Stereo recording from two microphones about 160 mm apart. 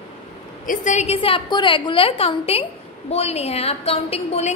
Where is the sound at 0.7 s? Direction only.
45° left (ahead or behind).